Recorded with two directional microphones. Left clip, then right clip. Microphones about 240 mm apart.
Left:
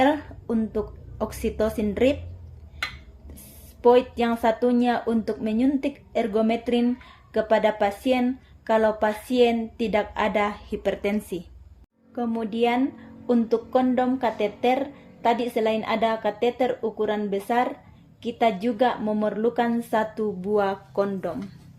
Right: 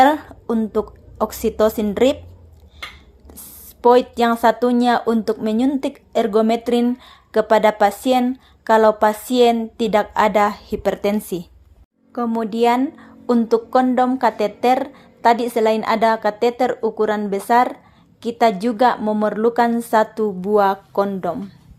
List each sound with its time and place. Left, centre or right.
0.0 s a woman's voice: right
3.8 s speech: right